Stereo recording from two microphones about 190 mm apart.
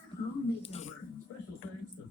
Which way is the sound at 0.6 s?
35° left (ahead or behind).